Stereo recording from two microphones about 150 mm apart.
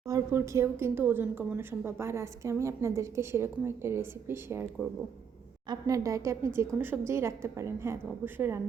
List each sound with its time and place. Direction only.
0.0 s a woman's voice: 20° right (ahead or behind)
5.6 s a woman's voice: 25° right (ahead or behind)